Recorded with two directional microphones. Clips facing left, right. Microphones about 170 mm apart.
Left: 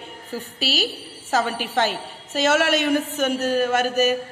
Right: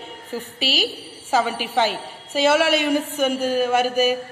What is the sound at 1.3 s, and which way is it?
A man's voice, 10° right (ahead or behind).